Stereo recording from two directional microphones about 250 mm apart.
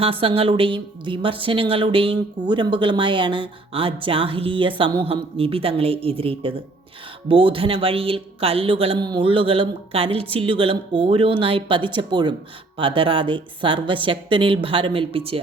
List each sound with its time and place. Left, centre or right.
0.0 s speech: right